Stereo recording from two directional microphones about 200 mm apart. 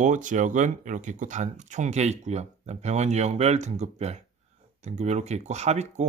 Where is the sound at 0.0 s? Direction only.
40° right (ahead or behind).